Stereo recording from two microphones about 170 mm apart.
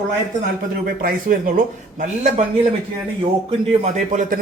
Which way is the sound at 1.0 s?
55° right (ahead or behind).